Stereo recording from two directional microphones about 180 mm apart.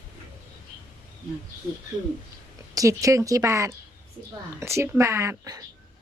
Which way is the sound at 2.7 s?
20° right (ahead or behind).